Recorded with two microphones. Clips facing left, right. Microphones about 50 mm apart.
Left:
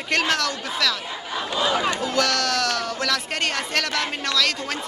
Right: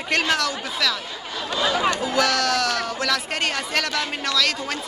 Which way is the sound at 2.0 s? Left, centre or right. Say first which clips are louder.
Right 1 dB; centre.